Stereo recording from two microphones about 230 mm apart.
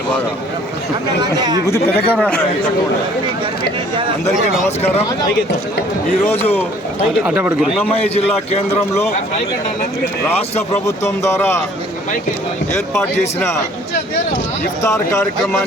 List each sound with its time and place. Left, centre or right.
1.2 s speech: centre
1.6 s a man's voice: centre
6.2 s a man's voice: centre
7.3 s speech: centre
7.9 s a man's voice: left
10.8 s a man's voice: centre
14.8 s a man's voice: centre